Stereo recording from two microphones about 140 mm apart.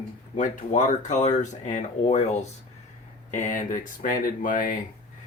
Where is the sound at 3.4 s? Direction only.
70° left (ahead or behind).